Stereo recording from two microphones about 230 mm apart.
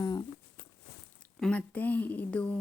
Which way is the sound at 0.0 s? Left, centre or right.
Centre.